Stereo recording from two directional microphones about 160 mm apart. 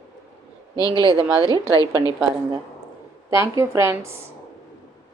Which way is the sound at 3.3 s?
15° right (ahead or behind).